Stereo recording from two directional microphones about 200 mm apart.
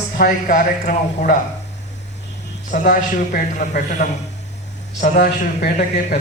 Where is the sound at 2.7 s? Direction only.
40° left (ahead or behind).